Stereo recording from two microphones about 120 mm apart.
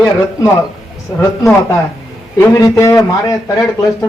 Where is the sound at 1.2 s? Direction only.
25° left (ahead or behind).